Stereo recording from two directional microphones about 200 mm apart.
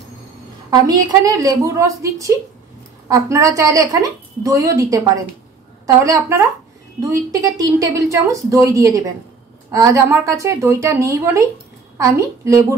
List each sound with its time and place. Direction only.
0.7 s a woman's voice: 20° right (ahead or behind)